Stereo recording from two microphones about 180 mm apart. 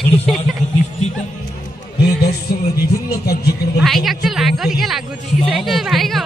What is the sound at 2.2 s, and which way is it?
A man's voice, 60° left (ahead or behind).